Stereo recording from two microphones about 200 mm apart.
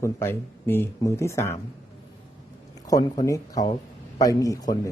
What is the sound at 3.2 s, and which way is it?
A man's voice, 15° left (ahead or behind).